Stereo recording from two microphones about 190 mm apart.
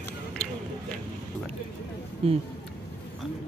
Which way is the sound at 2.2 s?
30° right (ahead or behind).